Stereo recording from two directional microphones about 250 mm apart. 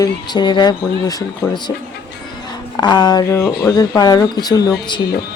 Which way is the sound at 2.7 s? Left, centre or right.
Centre.